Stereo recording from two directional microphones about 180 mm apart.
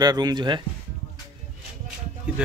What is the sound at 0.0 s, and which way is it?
Speech, 20° right (ahead or behind).